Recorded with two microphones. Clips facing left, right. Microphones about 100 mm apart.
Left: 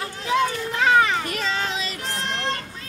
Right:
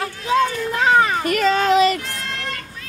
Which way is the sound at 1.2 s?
60° right (ahead or behind).